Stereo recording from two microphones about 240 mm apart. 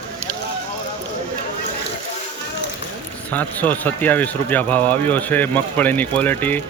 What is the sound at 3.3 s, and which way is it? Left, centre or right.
Speech, centre.